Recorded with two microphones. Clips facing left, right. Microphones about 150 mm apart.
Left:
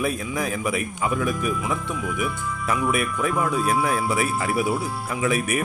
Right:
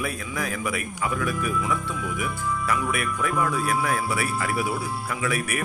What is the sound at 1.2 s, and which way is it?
Speech, 20° left (ahead or behind).